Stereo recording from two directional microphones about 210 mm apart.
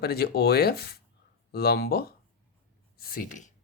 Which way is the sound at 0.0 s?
50° left (ahead or behind).